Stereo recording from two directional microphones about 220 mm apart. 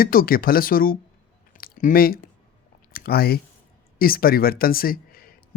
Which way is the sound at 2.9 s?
45° left (ahead or behind).